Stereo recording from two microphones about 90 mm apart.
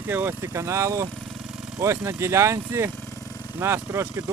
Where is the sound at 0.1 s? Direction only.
25° right (ahead or behind).